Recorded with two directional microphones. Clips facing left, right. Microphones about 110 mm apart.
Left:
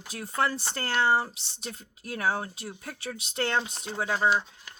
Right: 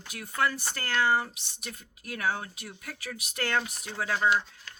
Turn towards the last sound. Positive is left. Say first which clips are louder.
# left 1 dB
turn(degrees=20)  # may be behind; listen again after turning